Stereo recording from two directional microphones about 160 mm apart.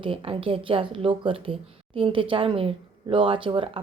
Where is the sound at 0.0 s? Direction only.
35° right (ahead or behind).